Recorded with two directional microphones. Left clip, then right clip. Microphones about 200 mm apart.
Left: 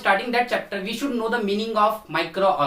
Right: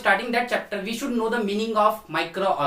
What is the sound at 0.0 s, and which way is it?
Speech, 5° left (ahead or behind).